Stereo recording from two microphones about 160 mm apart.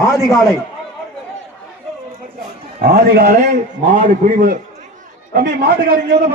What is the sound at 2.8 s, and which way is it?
A man's voice, 80° right.